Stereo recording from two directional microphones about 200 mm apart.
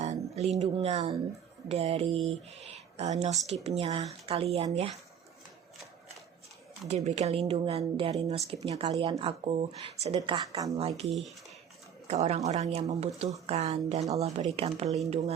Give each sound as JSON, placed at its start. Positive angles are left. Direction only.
{"t": 0.0, "sound": "speech", "side_deg": -35}
{"t": 6.8, "sound": "speech", "side_deg": -35}
{"t": 12.0, "sound": "speech", "side_deg": -30}